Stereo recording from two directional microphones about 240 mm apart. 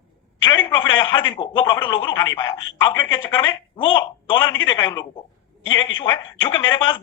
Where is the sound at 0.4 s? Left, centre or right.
Centre.